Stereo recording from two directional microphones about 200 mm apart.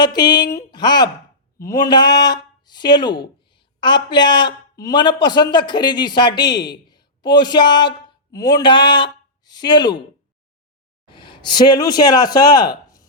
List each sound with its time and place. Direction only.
0.0 s speech: 20° left (ahead or behind)
11.0 s speech: 25° left (ahead or behind)